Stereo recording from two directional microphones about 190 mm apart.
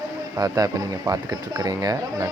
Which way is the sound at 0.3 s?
20° right (ahead or behind).